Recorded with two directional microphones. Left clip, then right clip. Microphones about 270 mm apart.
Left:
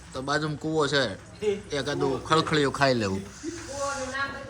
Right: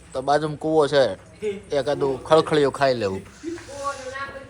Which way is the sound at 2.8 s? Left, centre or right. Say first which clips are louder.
Right 3 dB; centre.